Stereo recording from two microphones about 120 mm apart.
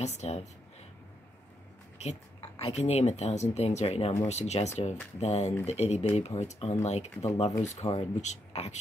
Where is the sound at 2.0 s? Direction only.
60° left (ahead or behind).